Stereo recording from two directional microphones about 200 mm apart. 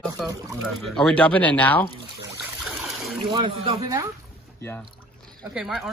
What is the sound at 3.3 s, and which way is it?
Speech, 25° right (ahead or behind).